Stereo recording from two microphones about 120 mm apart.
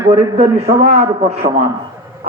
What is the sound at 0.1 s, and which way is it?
A man's voice, 50° right (ahead or behind).